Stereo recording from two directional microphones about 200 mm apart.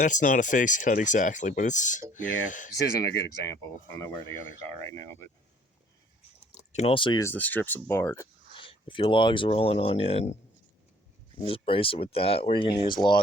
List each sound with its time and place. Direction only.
0.0 s speech: 40° left (ahead or behind)
3.4 s speech: 15° left (ahead or behind)
6.7 s speech: 30° left (ahead or behind); by 8.3 s 15° left (ahead or behind)
8.5 s speech: 25° left (ahead or behind)
11.3 s speech: 30° left (ahead or behind)